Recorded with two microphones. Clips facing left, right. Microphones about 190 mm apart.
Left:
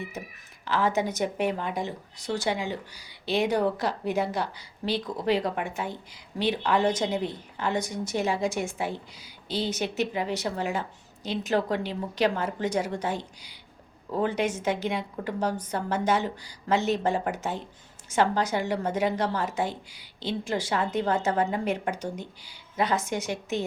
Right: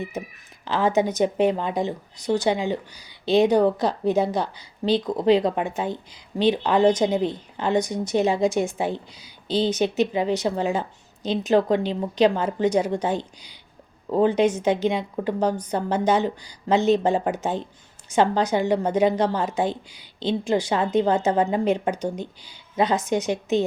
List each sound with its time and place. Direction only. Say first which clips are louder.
0.6 s speech: right 5 dB; 20° right (ahead or behind)